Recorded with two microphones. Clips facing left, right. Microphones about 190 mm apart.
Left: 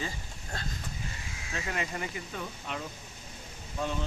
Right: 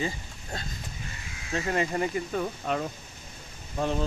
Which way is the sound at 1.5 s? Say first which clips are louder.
Right 8 dB; 35° right (ahead or behind).